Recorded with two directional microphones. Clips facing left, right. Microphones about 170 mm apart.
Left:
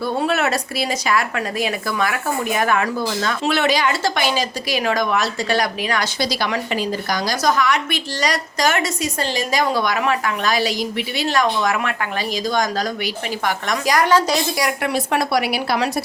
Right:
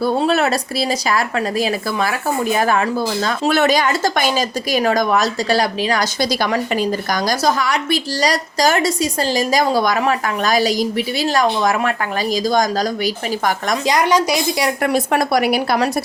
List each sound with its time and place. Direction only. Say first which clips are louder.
0.0 s a woman's voice: right 4 dB; 35° right (ahead or behind)
7.4 s a woman's voice: left 2 dB; 35° right (ahead or behind)
13.8 s a woman's voice: even; 20° right (ahead or behind)
14.8 s speech: right 4 dB; 45° right (ahead or behind)